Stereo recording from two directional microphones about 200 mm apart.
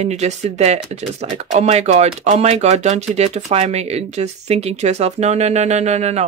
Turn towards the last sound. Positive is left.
turn(degrees=-35)  # may be behind; listen again after turning